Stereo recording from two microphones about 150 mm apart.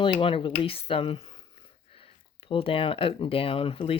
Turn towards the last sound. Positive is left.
turn(degrees=35)  # may be behind; listen again after turning